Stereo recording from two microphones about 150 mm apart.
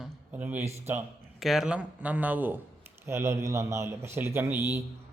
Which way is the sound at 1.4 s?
Centre (ahead or behind).